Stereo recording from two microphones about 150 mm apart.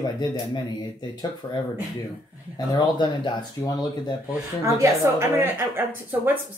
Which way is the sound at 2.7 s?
25° left (ahead or behind).